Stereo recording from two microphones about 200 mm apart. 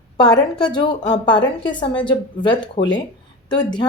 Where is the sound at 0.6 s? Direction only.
20° left (ahead or behind).